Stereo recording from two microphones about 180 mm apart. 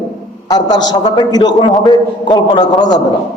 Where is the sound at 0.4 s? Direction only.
20° left (ahead or behind).